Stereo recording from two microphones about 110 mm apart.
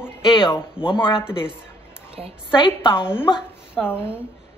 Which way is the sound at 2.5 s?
50° left (ahead or behind).